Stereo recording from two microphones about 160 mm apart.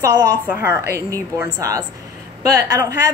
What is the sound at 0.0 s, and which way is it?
A woman's voice, 20° right (ahead or behind).